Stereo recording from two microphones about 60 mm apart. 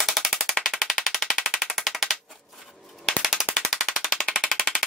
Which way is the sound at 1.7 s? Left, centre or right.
Centre.